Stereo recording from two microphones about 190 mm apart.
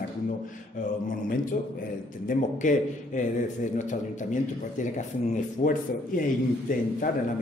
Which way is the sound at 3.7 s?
40° left (ahead or behind).